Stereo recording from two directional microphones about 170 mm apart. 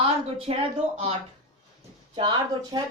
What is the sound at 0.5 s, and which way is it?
Speech, 35° right (ahead or behind).